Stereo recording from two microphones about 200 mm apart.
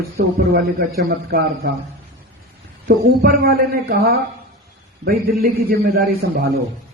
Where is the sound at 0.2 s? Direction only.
50° right (ahead or behind).